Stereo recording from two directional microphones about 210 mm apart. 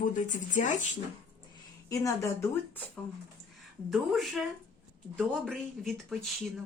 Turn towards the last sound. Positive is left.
turn(degrees=0)  # may be behind; listen again after turning